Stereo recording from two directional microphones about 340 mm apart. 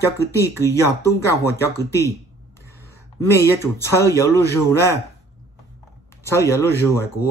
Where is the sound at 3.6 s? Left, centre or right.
Centre.